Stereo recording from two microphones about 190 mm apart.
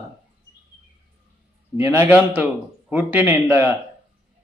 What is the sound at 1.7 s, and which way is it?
Speech, 10° right (ahead or behind).